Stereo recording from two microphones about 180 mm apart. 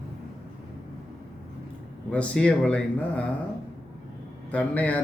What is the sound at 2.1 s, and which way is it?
A man's voice, 5° left (ahead or behind).